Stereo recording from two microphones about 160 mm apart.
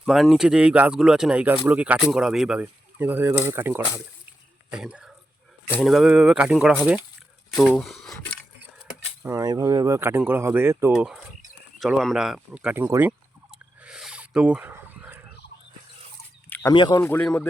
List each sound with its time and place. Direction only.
0.0 s speech: centre (ahead or behind)
9.2 s speech: 20° right (ahead or behind)
10.9 s speech: 5° right (ahead or behind)
11.8 s a sound: centre (ahead or behind)
16.7 s speech: 30° left (ahead or behind)
17.0 s speech: 10° left (ahead or behind)